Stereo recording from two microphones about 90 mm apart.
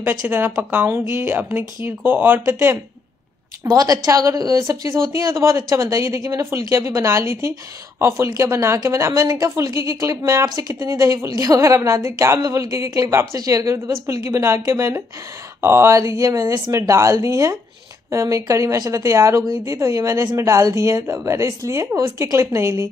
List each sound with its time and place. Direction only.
0.2 s speech: 20° right (ahead or behind)
3.6 s speech: 45° right (ahead or behind)